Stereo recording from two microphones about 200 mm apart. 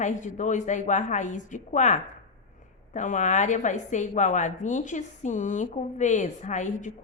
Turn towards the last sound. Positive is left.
turn(degrees=35)  # may be behind; listen again after turning